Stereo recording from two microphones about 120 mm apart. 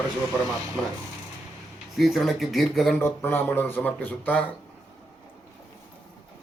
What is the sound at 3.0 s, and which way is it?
Speech, 20° left (ahead or behind).